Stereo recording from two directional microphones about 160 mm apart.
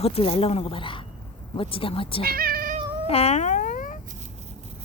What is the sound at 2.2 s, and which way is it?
Cat, 70° right (ahead or behind).